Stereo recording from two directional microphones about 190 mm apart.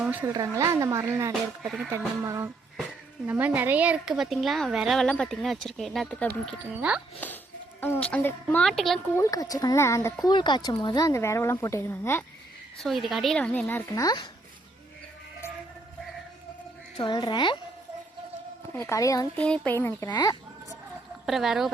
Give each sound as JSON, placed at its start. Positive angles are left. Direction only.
{"t": 0.0, "sound": "a sound", "side_deg": -10}
{"t": 0.3, "sound": "a woman's voice", "side_deg": -20}
{"t": 1.6, "sound": "speech", "side_deg": -5}
{"t": 2.2, "sound": "a woman's voice", "side_deg": -15}
{"t": 7.2, "sound": "speech", "side_deg": 10}
{"t": 9.1, "sound": "speech", "side_deg": 15}
{"t": 12.7, "sound": "speech", "side_deg": 0}
{"t": 17.0, "sound": "speech", "side_deg": 25}
{"t": 18.7, "sound": "speech", "side_deg": 15}
{"t": 19.4, "sound": "speech", "side_deg": 5}
{"t": 21.2, "sound": "speech", "side_deg": 0}